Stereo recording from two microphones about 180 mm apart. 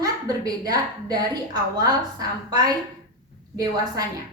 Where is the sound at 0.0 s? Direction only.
20° right (ahead or behind).